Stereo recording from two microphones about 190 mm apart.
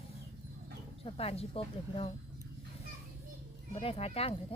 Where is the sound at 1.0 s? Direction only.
30° left (ahead or behind).